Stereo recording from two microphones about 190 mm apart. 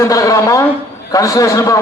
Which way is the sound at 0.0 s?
15° left (ahead or behind).